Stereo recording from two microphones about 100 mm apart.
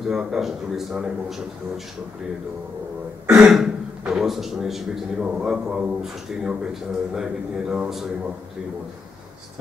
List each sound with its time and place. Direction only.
0.1 s a man's voice: 5° right (ahead or behind)
3.3 s a man's voice: 10° right (ahead or behind)